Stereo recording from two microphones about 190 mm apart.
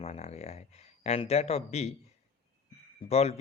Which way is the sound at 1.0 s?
35° left (ahead or behind).